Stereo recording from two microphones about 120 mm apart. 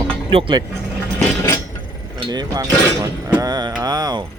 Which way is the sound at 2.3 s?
35° right (ahead or behind).